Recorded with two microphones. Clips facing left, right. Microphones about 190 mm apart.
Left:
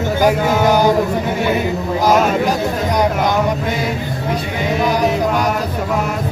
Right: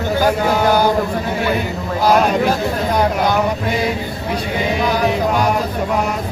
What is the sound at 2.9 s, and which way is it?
Speech, 15° left (ahead or behind).